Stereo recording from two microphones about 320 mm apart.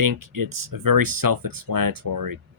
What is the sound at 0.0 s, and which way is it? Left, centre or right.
Speech, right.